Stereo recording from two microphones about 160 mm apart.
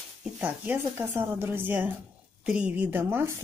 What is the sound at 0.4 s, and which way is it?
Speech, 10° right (ahead or behind).